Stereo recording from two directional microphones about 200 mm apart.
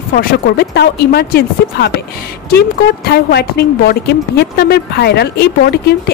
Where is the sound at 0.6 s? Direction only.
55° left (ahead or behind).